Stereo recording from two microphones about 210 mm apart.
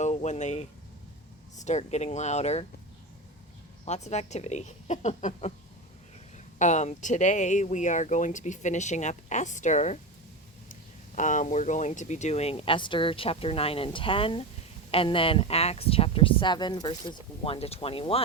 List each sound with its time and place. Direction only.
0.0 s speech: 35° left (ahead or behind)
3.8 s speech: 30° left (ahead or behind)